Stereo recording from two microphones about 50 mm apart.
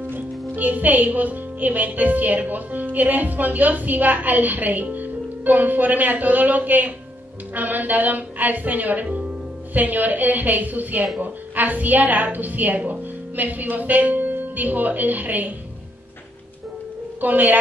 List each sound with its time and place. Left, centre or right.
0.1 s speech: right
17.2 s speech: right